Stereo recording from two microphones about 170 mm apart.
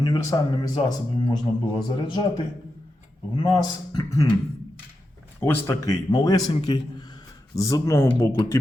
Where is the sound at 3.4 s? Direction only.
25° left (ahead or behind).